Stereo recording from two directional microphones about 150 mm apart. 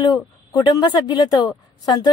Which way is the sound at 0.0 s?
30° left (ahead or behind).